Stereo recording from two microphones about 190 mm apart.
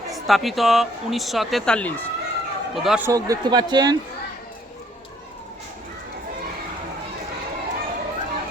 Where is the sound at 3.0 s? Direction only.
20° right (ahead or behind).